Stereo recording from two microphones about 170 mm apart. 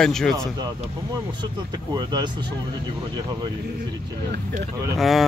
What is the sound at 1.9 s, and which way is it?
Speech, 25° right (ahead or behind).